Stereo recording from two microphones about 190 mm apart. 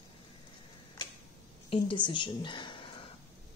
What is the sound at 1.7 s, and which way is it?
A woman's voice, 25° left (ahead or behind).